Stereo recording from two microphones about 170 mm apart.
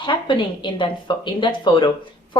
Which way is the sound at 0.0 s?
30° left (ahead or behind).